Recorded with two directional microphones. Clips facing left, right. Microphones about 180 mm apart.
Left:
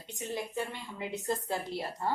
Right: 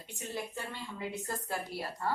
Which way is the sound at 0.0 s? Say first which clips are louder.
Left 3 dB; 20° left (ahead or behind).